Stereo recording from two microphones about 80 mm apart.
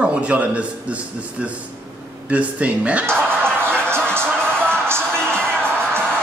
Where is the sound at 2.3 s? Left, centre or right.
Centre.